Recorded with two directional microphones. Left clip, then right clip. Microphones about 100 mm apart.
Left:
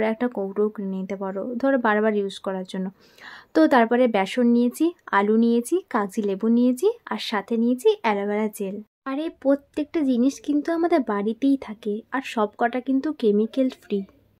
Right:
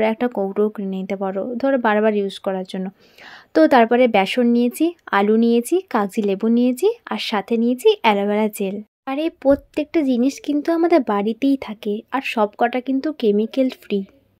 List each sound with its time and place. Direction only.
0.0 s speech: 20° right (ahead or behind)